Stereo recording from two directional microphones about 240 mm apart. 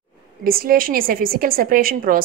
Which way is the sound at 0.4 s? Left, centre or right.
Right.